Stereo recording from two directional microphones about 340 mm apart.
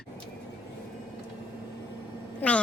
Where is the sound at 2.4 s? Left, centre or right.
Centre.